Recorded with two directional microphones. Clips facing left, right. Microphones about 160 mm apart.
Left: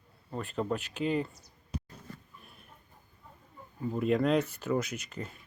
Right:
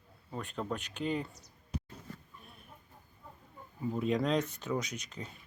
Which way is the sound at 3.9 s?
5° left (ahead or behind).